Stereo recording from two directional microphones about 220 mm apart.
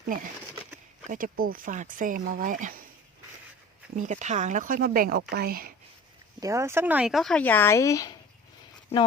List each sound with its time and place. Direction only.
0.0 s speech: 40° right (ahead or behind)
3.9 s speech: 35° right (ahead or behind)
6.4 s speech: 15° right (ahead or behind); by 8.1 s 15° left (ahead or behind)